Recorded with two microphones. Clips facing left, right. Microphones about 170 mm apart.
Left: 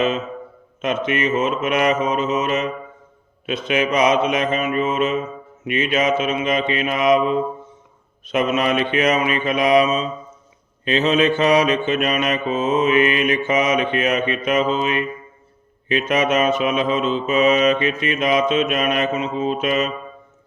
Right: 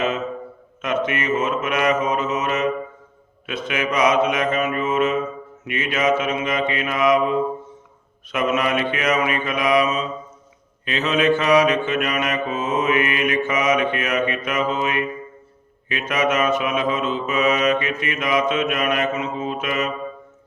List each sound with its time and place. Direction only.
0.8 s mantra: 25° left (ahead or behind)